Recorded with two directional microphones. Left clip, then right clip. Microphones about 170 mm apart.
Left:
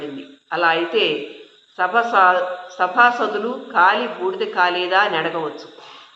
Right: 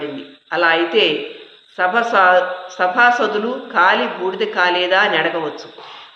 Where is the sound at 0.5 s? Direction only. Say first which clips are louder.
Right 3 dB; 20° right (ahead or behind).